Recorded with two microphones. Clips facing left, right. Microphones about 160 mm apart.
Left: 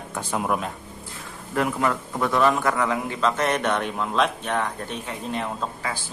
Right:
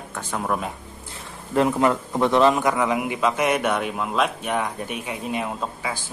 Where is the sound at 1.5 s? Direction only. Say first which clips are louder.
Right 4 dB; 25° right (ahead or behind).